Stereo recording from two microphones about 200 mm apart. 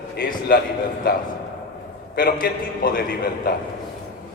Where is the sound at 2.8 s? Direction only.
45° left (ahead or behind).